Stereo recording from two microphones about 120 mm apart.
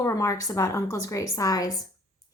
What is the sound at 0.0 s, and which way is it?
Speech, 25° left (ahead or behind).